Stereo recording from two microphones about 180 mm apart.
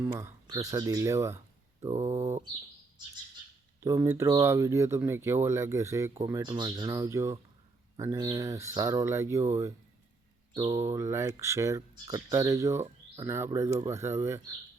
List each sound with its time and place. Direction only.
0.0 s speech: 15° right (ahead or behind)
3.8 s speech: 15° right (ahead or behind)